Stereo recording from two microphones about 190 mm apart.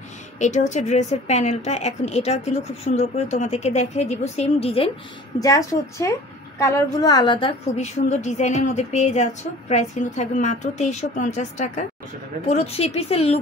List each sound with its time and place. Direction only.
0.4 s a woman's voice: 40° left (ahead or behind)
5.4 s a woman's voice: 15° left (ahead or behind); by 13.4 s 35° left (ahead or behind)